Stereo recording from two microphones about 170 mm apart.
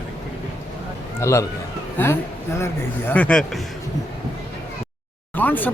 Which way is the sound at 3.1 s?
5° left (ahead or behind).